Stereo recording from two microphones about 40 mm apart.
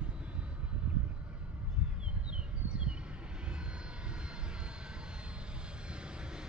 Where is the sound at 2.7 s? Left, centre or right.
Right.